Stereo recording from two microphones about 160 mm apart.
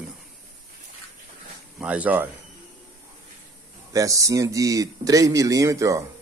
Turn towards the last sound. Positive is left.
turn(degrees=-20)  # may be behind; listen again after turning